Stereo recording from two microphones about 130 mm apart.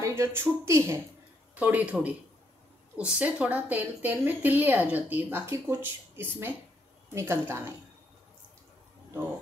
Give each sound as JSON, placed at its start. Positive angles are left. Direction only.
{"t": 0.0, "sound": "a woman's voice", "side_deg": -20}